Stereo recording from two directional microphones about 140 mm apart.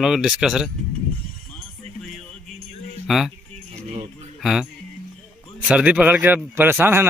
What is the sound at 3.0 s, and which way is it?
Speech, centre (ahead or behind).